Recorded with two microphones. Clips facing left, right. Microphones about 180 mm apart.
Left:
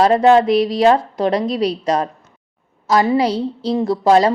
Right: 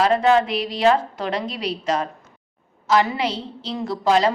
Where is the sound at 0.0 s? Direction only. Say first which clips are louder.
Left 5 dB; 35° left (ahead or behind).